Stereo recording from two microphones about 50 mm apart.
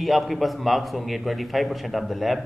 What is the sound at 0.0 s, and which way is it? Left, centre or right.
A man's voice, centre.